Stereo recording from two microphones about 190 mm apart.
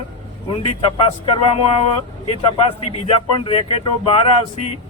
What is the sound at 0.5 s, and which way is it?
Speech, 30° left (ahead or behind).